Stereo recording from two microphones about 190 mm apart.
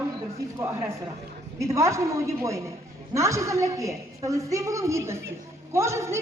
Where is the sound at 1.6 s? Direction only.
15° right (ahead or behind).